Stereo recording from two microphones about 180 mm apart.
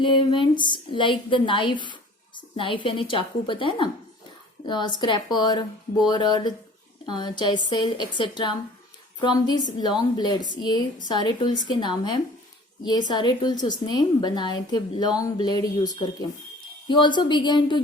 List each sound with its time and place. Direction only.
0.0 s a woman's voice: 30° left (ahead or behind)
9.7 s a woman's voice: 25° left (ahead or behind)
16.9 s a woman's voice: 25° left (ahead or behind)